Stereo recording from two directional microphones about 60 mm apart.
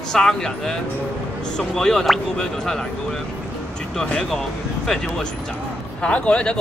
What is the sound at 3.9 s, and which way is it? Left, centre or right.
Speech, centre.